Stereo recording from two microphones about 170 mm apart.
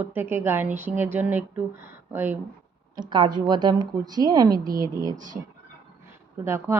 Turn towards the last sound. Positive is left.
turn(degrees=-15)  # may be behind; listen again after turning